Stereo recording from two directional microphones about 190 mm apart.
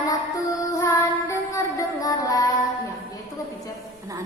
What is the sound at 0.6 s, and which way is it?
Child singing, 15° left (ahead or behind).